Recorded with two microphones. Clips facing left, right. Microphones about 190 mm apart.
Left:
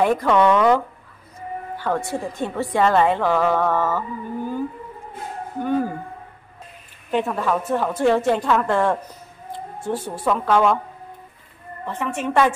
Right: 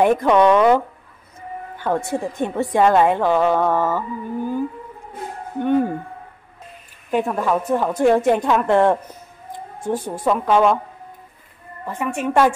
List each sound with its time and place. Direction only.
0.0 s a woman's voice: 15° right (ahead or behind)
5.6 s speech: 25° right (ahead or behind)
7.1 s a woman's voice: 10° right (ahead or behind)
11.8 s a woman's voice: 10° right (ahead or behind)